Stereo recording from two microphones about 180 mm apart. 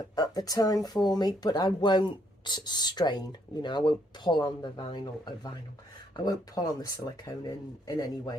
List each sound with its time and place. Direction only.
0.0 s speech: 20° left (ahead or behind)